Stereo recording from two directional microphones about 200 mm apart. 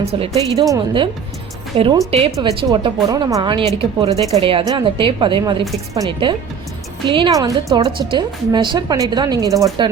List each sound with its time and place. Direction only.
0.1 s a woman's voice: 30° right (ahead or behind)